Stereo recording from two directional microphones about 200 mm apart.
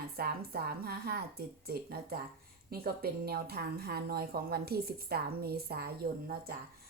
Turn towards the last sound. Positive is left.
turn(degrees=-50)  # may be behind; listen again after turning